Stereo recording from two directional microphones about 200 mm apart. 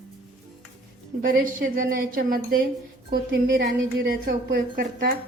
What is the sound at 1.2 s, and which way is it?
A woman's voice, 45° right (ahead or behind).